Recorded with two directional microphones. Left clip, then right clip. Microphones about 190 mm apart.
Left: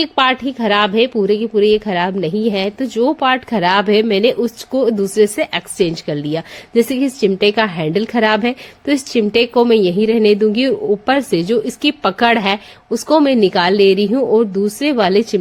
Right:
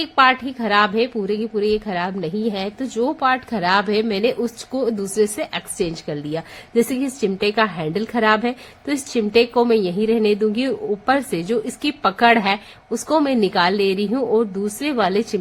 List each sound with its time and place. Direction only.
0.0 s a woman's voice: 30° left (ahead or behind)